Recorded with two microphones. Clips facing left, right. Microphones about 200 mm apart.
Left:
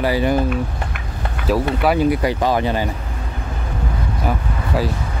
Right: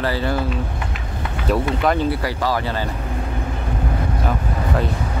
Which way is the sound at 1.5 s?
5° left (ahead or behind).